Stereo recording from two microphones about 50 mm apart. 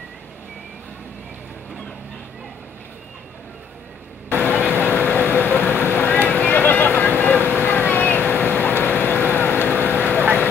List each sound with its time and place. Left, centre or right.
4.3 s vehicle: left